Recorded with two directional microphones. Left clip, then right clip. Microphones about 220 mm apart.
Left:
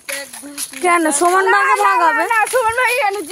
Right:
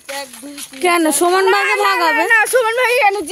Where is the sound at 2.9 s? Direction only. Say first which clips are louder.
Right 3 dB; 15° right (ahead or behind).